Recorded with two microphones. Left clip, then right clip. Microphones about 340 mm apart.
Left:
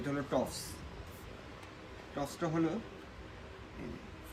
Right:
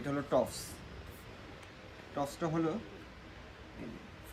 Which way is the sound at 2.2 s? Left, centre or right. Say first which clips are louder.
Even; centre.